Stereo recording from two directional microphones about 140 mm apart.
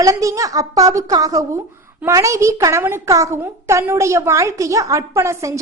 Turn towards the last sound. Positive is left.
turn(degrees=-20)  # may be behind; listen again after turning